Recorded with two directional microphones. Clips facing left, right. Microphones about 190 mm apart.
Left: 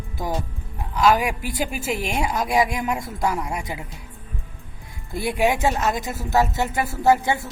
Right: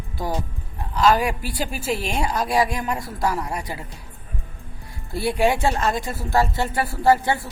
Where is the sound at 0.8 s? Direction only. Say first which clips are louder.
Even; 15° left (ahead or behind).